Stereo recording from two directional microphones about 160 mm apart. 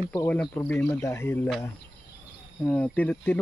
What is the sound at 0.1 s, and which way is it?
Speech, 15° left (ahead or behind).